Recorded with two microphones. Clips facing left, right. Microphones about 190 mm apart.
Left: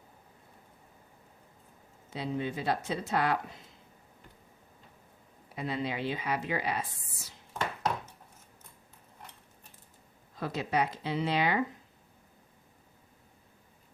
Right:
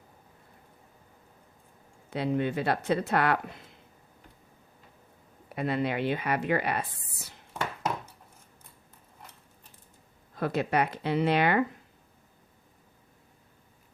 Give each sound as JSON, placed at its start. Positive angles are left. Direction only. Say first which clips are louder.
{"t": 2.0, "sound": "speech", "louder": "right 6 dB", "side_deg": -60}
{"t": 5.5, "sound": "speech", "louder": "right 5 dB", "side_deg": -60}
{"t": 10.3, "sound": "speech", "louder": "right 4 dB", "side_deg": -60}